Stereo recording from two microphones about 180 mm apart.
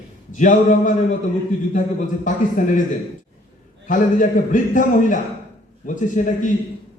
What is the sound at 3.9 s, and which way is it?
A man's voice, 45° left (ahead or behind).